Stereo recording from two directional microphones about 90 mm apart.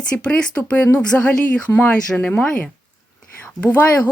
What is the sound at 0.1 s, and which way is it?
Speech, 10° left (ahead or behind).